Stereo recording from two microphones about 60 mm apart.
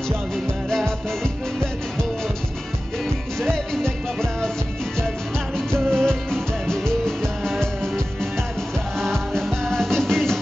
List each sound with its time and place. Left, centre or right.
0.7 s music: centre
3.3 s music: centre
5.9 s music: centre